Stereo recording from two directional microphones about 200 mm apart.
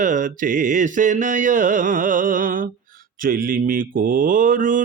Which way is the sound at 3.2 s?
45° right (ahead or behind).